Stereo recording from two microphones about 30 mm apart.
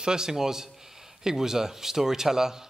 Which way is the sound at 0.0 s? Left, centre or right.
Right.